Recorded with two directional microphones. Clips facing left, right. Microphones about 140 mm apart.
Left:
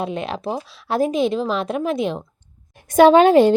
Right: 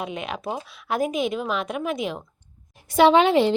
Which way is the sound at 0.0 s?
35° left (ahead or behind).